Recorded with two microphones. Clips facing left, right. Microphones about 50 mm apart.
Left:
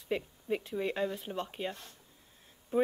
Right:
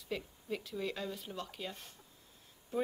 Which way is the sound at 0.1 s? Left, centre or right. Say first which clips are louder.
Left 6 dB; left.